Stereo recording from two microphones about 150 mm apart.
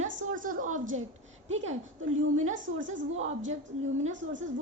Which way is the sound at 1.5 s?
50° right (ahead or behind).